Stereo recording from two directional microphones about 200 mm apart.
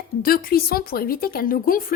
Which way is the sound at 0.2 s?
45° left (ahead or behind).